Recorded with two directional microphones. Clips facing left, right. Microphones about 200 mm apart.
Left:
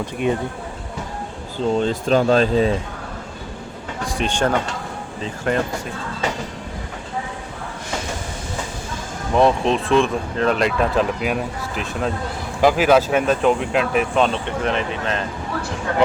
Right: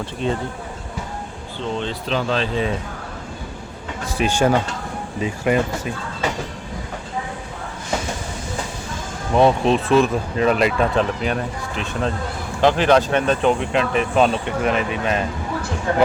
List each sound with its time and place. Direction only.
0.0 s speech: 15° left (ahead or behind)
1.5 s speech: 40° left (ahead or behind)
4.2 s speech: 10° right (ahead or behind)
9.3 s speech: centre (ahead or behind)